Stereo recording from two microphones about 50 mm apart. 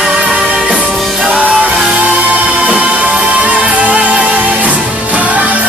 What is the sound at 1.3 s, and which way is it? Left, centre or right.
Music, right.